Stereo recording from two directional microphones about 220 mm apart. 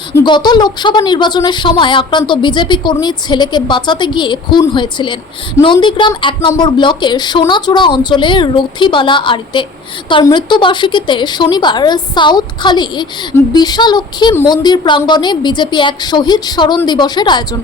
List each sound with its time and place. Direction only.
0.3 s speech: 20° left (ahead or behind)